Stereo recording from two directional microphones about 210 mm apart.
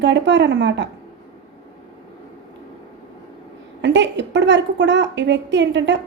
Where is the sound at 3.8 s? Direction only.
60° right (ahead or behind).